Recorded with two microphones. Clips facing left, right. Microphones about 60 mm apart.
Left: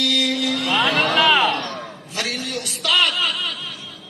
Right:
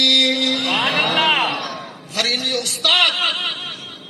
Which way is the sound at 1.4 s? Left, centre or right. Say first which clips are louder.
Left 2 dB; centre.